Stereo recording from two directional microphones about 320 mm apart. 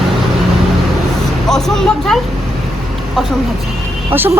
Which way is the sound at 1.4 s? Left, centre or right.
Centre.